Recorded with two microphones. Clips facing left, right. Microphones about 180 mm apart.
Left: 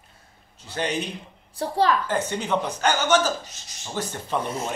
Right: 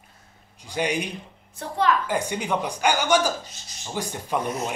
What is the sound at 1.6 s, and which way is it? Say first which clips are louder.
Speech: left 2 dB; 35° left (ahead or behind).